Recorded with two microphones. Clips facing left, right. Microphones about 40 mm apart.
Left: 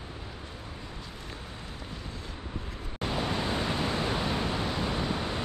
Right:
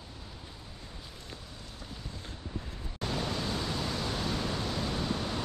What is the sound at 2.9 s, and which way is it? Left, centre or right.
Pink noise, left.